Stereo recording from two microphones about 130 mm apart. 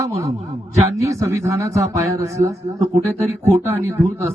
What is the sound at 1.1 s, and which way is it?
Speech, 20° right (ahead or behind).